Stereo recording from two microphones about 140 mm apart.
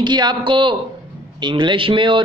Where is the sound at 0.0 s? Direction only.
30° right (ahead or behind).